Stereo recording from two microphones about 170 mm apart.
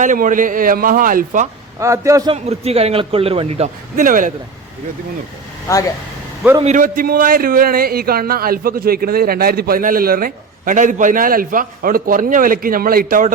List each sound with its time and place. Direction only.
0.0 s a man's voice: 50° right (ahead or behind)
1.8 s a man's voice: 20° right (ahead or behind)
2.3 s a man's voice: 35° right (ahead or behind)
6.6 s speech: 45° right (ahead or behind)